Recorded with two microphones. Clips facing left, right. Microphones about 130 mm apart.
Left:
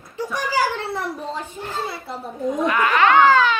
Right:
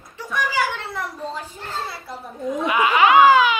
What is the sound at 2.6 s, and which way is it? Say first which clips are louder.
Speech: right 1 dB; 10° right (ahead or behind).